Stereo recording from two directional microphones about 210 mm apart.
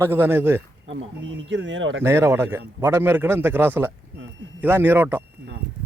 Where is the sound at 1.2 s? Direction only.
65° right (ahead or behind).